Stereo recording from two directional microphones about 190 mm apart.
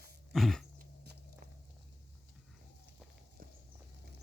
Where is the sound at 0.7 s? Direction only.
60° right (ahead or behind).